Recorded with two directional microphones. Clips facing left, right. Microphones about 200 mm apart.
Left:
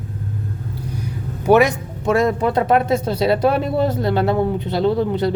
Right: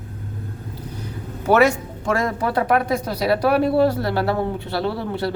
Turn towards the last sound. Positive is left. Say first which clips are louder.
# left 6 dB
turn(degrees=20)  # may be behind; listen again after turning